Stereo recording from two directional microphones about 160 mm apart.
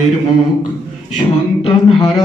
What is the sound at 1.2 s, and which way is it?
Speech, 35° left (ahead or behind).